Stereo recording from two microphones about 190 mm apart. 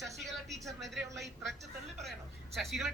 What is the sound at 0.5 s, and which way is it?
A woman's voice, centre (ahead or behind).